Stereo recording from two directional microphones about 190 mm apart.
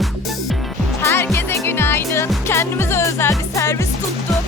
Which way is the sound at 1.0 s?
15° left (ahead or behind).